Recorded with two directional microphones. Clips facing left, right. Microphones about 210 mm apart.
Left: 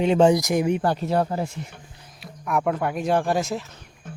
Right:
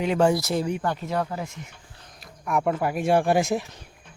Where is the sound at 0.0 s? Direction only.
25° left (ahead or behind).